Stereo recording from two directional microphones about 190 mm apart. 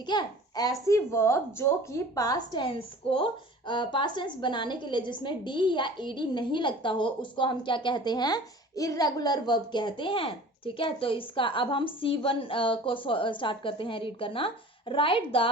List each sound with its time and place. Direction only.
0.0 s a woman's voice: 25° left (ahead or behind)